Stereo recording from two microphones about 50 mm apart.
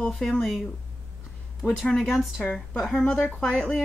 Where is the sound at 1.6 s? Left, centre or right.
Left.